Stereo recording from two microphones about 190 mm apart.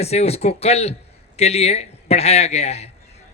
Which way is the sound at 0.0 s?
35° left (ahead or behind).